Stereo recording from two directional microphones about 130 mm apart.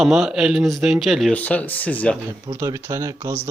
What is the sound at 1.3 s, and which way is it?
Speech, 10° left (ahead or behind).